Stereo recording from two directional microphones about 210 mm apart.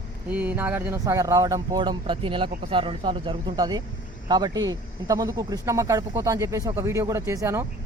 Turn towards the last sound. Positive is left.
turn(degrees=-15)  # may be behind; listen again after turning